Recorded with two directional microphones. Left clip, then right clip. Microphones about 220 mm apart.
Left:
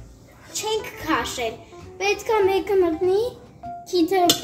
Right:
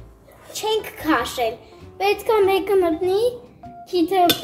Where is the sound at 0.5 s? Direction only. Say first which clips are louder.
Right 3 dB; 45° right (ahead or behind).